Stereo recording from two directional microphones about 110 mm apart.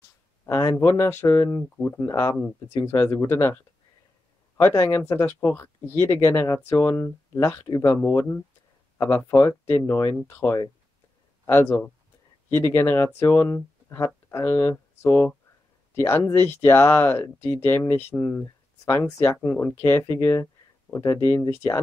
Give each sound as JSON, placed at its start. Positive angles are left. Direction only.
{"t": 0.5, "sound": "speech", "side_deg": 30}
{"t": 4.6, "sound": "speech", "side_deg": 20}
{"t": 8.0, "sound": "speech", "side_deg": 20}